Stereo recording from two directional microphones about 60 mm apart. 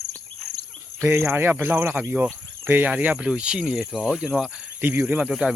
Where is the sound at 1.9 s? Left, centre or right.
Right.